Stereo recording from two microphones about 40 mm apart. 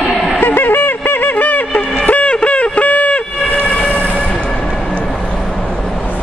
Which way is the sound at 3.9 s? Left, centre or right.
Left.